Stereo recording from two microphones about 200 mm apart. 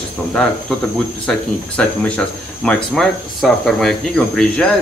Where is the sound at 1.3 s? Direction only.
5° left (ahead or behind).